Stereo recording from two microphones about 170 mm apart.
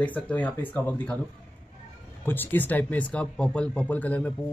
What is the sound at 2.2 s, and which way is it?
Speech, 10° left (ahead or behind).